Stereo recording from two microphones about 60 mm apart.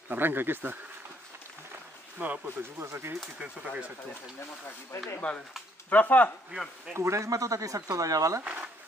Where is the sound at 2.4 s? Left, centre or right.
Right.